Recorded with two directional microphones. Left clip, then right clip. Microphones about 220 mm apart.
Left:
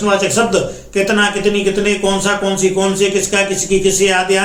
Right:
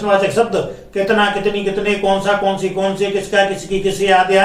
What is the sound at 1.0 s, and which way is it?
Speech, 15° left (ahead or behind).